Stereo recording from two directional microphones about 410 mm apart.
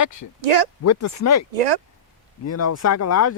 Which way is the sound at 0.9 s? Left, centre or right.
Left.